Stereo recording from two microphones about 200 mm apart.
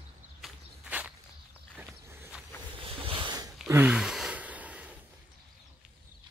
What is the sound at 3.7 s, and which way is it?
Sigh, 10° right (ahead or behind).